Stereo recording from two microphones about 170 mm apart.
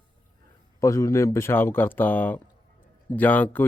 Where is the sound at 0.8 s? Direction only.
20° left (ahead or behind).